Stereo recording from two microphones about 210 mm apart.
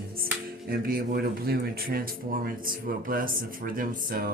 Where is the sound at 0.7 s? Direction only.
45° right (ahead or behind).